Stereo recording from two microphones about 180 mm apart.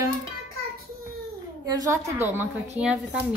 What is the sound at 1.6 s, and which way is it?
A woman's voice, 20° right (ahead or behind).